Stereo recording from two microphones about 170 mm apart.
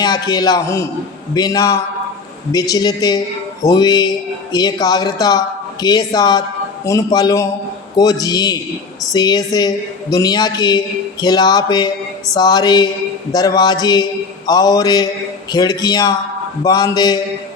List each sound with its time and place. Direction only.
0.0 s a woman's voice: 25° left (ahead or behind)